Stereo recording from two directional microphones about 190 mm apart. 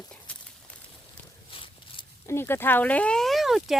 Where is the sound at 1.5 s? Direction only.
25° left (ahead or behind).